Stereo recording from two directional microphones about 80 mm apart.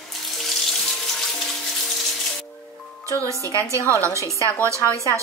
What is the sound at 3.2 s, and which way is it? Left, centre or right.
A woman's voice, right.